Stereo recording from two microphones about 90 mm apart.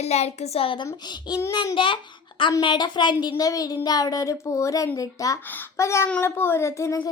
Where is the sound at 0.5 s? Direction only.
80° left.